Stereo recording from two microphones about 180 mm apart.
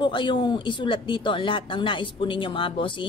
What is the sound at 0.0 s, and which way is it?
Speech, 25° left (ahead or behind).